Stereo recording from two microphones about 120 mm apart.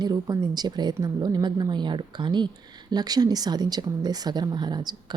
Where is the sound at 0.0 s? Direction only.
35° right (ahead or behind).